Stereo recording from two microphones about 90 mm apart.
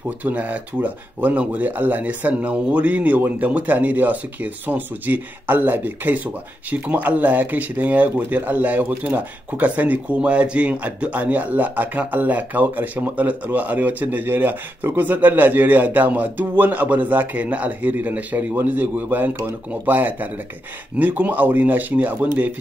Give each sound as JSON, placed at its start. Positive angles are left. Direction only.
{"t": 0.2, "sound": "speech", "side_deg": -15}